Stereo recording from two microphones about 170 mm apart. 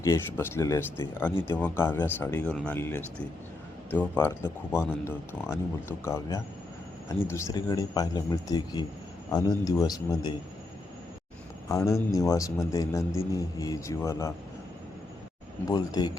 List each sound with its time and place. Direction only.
0.0 s speech: 15° left (ahead or behind)
11.7 s speech: 15° left (ahead or behind)
15.6 s speech: 25° left (ahead or behind)